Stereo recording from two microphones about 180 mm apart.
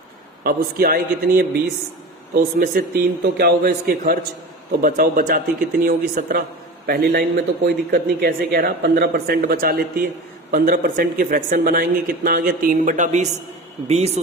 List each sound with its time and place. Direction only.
0.4 s a man's voice: 55° right (ahead or behind); by 14.1 s 35° right (ahead or behind)